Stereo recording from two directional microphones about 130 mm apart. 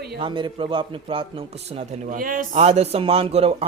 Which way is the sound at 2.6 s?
55° right (ahead or behind).